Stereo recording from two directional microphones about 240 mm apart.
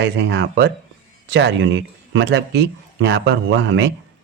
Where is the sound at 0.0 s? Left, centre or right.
Right.